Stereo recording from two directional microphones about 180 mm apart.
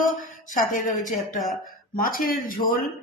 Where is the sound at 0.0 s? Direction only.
45° left (ahead or behind).